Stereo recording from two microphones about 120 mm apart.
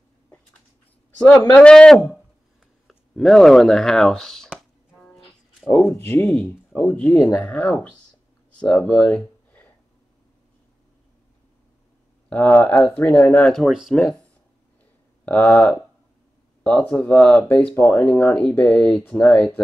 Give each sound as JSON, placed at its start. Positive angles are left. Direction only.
{"t": 1.1, "sound": "speech", "side_deg": 5}
{"t": 5.0, "sound": "music", "side_deg": 5}
{"t": 5.7, "sound": "speech", "side_deg": 10}
{"t": 8.5, "sound": "a sound", "side_deg": 10}
{"t": 12.3, "sound": "speech", "side_deg": 10}
{"t": 15.2, "sound": "speech", "side_deg": 10}
{"t": 16.9, "sound": "speech", "side_deg": 10}